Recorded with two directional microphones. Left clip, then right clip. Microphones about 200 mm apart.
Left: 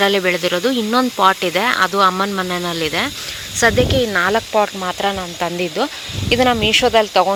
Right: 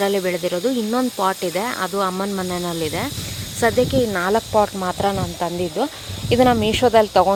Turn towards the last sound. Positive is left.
turn(degrees=-15)  # may be behind; listen again after turning